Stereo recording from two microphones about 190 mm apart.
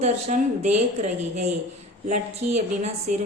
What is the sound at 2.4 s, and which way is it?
Speech, 35° right (ahead or behind).